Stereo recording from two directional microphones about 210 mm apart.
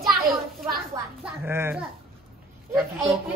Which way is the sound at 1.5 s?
10° right (ahead or behind).